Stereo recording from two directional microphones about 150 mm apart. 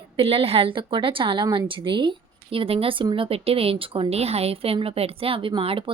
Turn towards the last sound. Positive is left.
turn(degrees=-35)  # may be behind; listen again after turning